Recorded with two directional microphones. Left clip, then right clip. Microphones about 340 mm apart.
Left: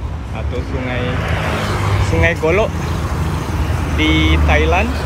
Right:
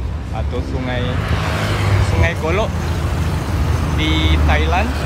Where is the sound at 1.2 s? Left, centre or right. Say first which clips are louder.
Left 2 dB; left.